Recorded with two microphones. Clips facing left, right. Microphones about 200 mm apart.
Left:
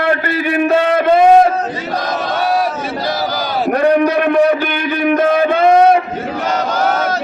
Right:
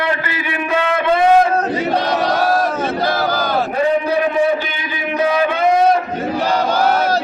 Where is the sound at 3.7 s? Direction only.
70° left (ahead or behind); by 5.5 s 50° left (ahead or behind).